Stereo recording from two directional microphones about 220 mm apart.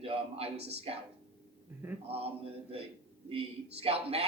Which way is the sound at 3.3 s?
25° right (ahead or behind).